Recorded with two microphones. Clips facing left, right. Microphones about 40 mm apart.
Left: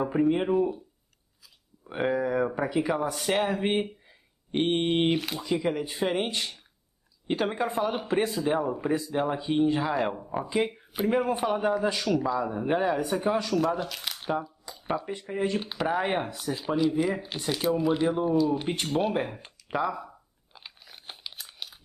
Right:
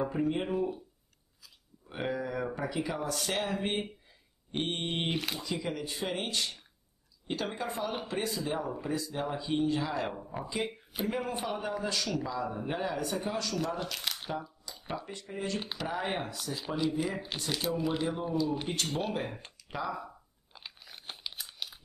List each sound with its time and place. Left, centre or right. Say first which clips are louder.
0.1 s speech: left 7 dB; centre
1.9 s speech: left 8 dB; centre
10.1 s speech: left 8 dB; centre
13.6 s speech: left 7 dB; centre
14.7 s a sound: left 3 dB; left
15.0 s speech: left 8 dB; left
16.5 s speech: left 6 dB; centre
19.9 s crunch: left 3 dB; centre